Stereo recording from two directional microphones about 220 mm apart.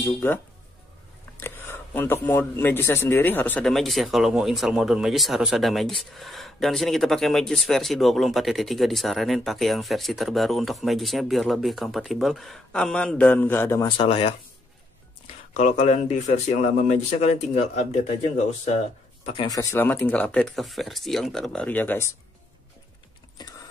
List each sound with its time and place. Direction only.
0.0 s speech: 10° left (ahead or behind)
1.4 s speech: 10° left (ahead or behind); by 14.3 s 25° left (ahead or behind)
15.5 s speech: 35° left (ahead or behind)
19.2 s speech: 20° left (ahead or behind)